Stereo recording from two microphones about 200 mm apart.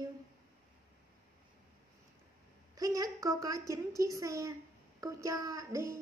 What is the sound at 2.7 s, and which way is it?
A woman's voice, 15° right (ahead or behind).